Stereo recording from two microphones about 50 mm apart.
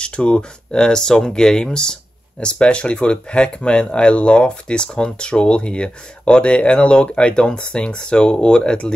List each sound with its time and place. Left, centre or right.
0.0 s speech: left